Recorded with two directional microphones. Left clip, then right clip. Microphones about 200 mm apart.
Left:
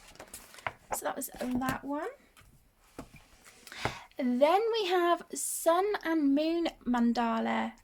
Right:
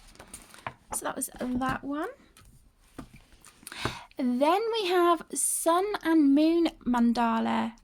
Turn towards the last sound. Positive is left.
turn(degrees=-30)  # may be behind; listen again after turning